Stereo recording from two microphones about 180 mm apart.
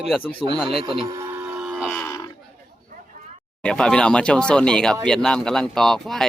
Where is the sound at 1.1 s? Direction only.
15° right (ahead or behind).